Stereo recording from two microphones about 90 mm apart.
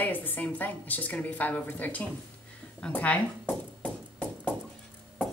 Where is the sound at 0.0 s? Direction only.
20° left (ahead or behind).